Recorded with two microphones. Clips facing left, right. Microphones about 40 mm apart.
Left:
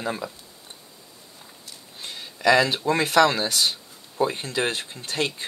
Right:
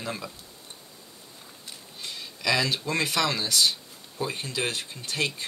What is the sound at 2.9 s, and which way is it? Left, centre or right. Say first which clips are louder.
Speech: left 9 dB; left.